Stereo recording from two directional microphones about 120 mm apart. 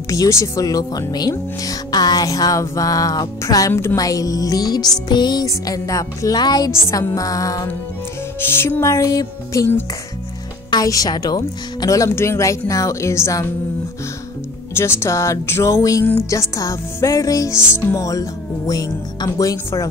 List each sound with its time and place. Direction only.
0.1 s music: 25° left (ahead or behind)
10.7 s music: 30° left (ahead or behind)
14.8 s music: 20° left (ahead or behind)